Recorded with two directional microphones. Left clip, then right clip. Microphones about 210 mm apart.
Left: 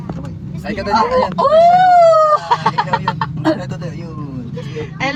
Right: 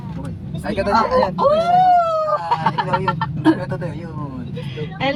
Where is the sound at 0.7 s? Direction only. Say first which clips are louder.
Left 2 dB; 20° left (ahead or behind).